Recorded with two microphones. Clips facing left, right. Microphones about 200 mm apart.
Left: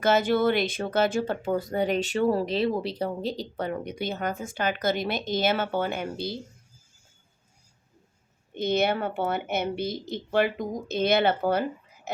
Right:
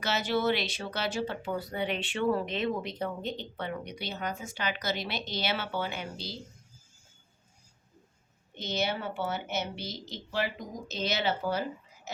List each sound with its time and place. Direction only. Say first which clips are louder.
0.0 s speech: left 7 dB; 50° left (ahead or behind)
8.5 s a woman's voice: left 8 dB; 55° left (ahead or behind)
12.1 s frog: left 7 dB; 60° left (ahead or behind)